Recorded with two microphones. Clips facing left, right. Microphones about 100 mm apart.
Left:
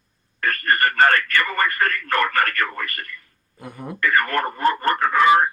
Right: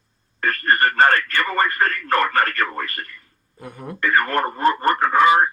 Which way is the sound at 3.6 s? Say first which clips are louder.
Even; centre (ahead or behind).